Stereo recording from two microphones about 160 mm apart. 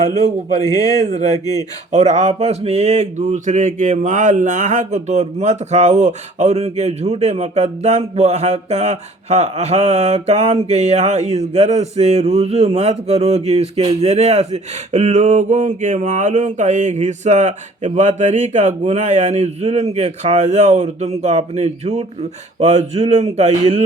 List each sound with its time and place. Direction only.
1.9 s speech: 45° right (ahead or behind)